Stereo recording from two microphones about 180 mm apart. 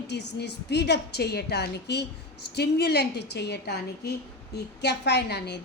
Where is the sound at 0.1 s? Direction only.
70° left (ahead or behind).